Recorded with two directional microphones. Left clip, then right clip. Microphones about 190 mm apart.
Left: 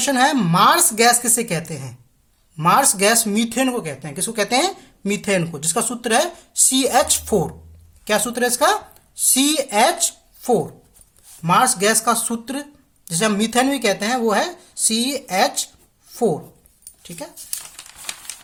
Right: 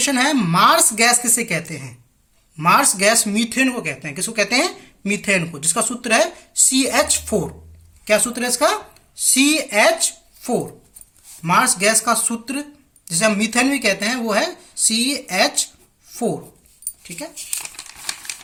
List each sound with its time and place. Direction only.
0.0 s speech: 45° left (ahead or behind)
16.0 s writing: 40° left (ahead or behind)
17.2 s speech: 45° left (ahead or behind)
17.7 s crumpling: 10° left (ahead or behind)